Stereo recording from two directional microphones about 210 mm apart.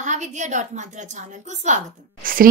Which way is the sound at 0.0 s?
35° right (ahead or behind).